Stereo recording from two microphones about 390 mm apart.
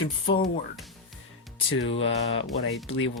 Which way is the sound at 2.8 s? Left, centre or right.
Left.